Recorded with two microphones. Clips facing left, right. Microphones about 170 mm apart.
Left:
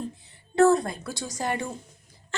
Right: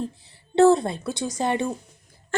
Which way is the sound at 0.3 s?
30° right (ahead or behind).